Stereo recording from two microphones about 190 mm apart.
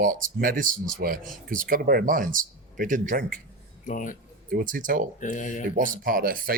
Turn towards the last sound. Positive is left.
turn(degrees=-50)  # may be behind; listen again after turning